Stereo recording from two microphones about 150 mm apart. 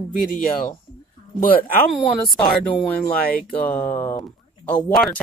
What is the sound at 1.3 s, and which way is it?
Speech, 70° left (ahead or behind).